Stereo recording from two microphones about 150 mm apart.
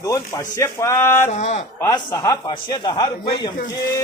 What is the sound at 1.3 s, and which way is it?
Speech, 50° left (ahead or behind).